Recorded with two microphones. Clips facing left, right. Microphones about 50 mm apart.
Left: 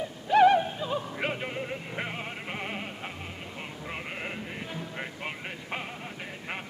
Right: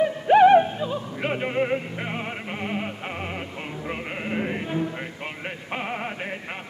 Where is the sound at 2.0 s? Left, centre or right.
Centre.